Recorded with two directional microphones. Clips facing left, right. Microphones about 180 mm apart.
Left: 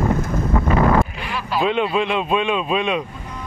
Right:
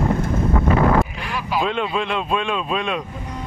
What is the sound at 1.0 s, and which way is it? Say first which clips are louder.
Vehicle: left 1 dB; centre (ahead or behind).